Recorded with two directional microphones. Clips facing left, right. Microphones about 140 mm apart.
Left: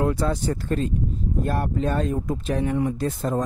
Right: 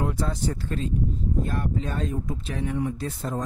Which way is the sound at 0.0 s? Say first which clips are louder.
Left 4 dB; 70° left (ahead or behind).